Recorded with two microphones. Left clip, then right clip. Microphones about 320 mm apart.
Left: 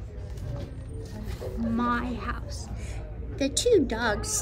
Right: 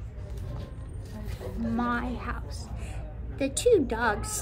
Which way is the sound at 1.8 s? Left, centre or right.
Centre.